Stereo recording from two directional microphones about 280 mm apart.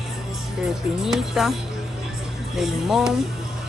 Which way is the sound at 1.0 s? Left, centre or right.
Centre.